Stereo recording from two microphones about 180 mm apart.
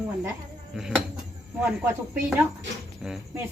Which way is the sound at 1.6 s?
10° right (ahead or behind).